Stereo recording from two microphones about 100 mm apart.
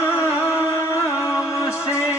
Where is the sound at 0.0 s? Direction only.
25° left (ahead or behind).